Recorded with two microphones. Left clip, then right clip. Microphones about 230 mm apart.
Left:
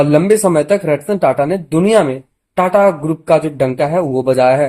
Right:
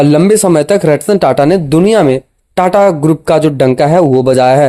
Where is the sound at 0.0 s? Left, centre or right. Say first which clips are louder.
Right 3 dB; right.